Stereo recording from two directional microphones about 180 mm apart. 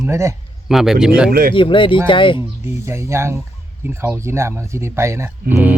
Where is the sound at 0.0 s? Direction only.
15° right (ahead or behind).